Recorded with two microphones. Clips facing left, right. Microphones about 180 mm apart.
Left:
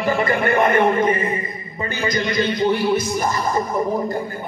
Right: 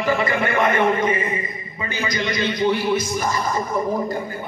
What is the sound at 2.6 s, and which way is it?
Music, 40° left (ahead or behind).